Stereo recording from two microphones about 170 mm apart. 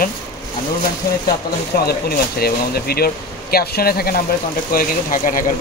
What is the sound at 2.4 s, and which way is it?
Speech, 65° left (ahead or behind).